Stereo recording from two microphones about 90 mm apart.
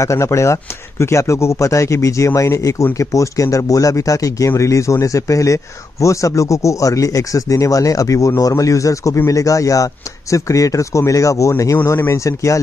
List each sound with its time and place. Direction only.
0.0 s speech: 35° left (ahead or behind)